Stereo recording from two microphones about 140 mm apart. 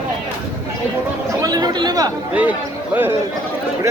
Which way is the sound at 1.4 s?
30° right (ahead or behind).